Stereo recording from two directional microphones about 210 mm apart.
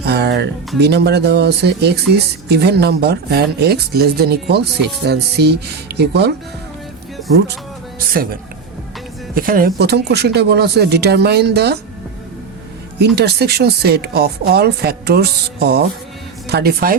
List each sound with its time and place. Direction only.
0.0 s speech: 50° right (ahead or behind)
8.1 s speech: 45° right (ahead or behind)
13.0 s speech: 50° right (ahead or behind)